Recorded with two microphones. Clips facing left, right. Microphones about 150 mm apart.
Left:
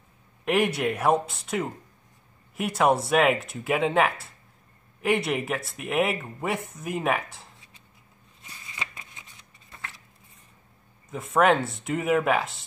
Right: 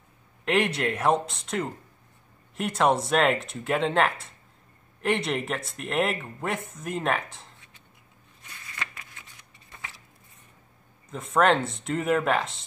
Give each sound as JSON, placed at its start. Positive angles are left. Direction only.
{"t": 0.5, "sound": "speech", "side_deg": 10}
{"t": 8.4, "sound": "a sound", "side_deg": 25}
{"t": 11.1, "sound": "speech", "side_deg": 5}